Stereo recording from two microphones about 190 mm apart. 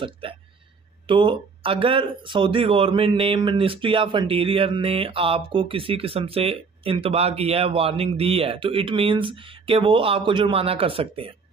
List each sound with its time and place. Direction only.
0.0 s speech: 30° right (ahead or behind)